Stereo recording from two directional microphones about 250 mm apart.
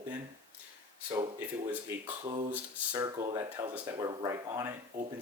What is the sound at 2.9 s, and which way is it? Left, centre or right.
Speech, centre.